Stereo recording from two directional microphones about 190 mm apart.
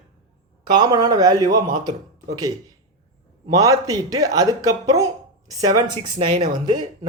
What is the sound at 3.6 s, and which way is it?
Speech, 20° right (ahead or behind).